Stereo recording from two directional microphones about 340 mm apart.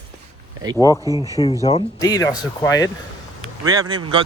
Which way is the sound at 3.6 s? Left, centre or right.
Centre.